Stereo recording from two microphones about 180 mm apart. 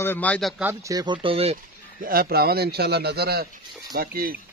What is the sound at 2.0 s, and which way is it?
A man's voice, 55° right (ahead or behind).